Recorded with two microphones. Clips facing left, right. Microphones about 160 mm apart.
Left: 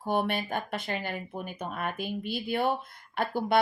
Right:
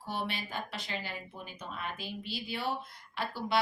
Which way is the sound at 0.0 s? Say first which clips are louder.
Left 9 dB; 55° left (ahead or behind).